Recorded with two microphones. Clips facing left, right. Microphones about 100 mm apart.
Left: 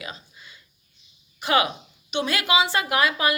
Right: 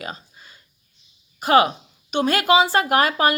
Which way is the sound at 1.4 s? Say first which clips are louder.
Right 6 dB; 40° right (ahead or behind).